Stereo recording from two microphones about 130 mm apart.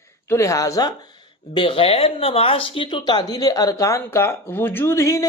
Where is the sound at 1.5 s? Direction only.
45° left (ahead or behind).